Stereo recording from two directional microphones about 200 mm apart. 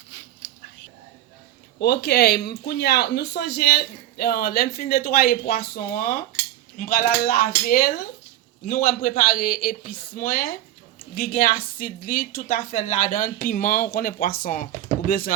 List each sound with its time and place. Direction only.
1.8 s speech: 55° left (ahead or behind)